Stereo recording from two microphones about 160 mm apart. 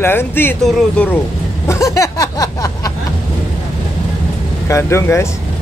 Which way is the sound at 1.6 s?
20° left (ahead or behind).